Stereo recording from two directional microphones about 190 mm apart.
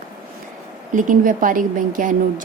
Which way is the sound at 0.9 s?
45° right (ahead or behind).